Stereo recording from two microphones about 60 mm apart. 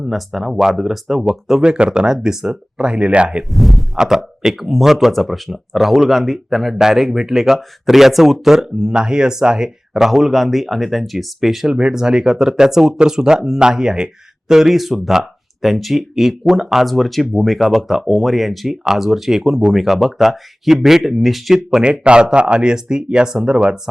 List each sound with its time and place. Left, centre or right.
0.0 s speech: centre
3.5 s a sound: centre
3.9 s speech: centre